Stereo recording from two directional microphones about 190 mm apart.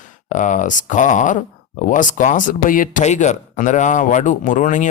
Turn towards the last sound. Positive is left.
turn(degrees=40)  # may be behind; listen again after turning